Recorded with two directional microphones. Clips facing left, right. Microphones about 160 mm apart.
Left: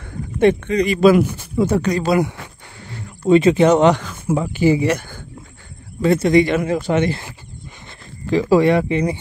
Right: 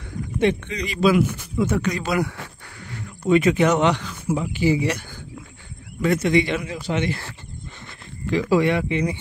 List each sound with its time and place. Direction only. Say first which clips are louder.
0.4 s speech: left 7 dB; 50° left (ahead or behind)
1.3 s speech: left 4 dB; 35° left (ahead or behind)
3.3 s speech: left 5 dB; 30° left (ahead or behind)
3.9 s speech: left 4 dB; 50° left (ahead or behind)
6.0 s speech: left 5 dB; 35° left (ahead or behind); by 7.1 s 50° left (ahead or behind)
8.3 s speech: left 5 dB; 35° left (ahead or behind)